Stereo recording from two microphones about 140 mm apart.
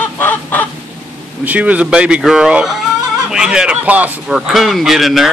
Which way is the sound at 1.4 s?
10° right (ahead or behind).